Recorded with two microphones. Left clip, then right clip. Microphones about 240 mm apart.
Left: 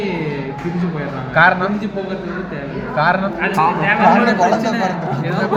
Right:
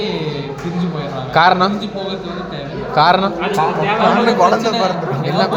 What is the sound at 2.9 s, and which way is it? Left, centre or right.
Speech, right.